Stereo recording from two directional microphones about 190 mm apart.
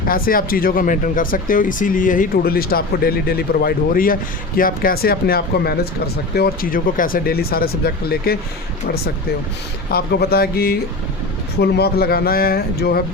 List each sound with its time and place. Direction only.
0.1 s speech: 50° left (ahead or behind)
9.9 s speech: 55° left (ahead or behind)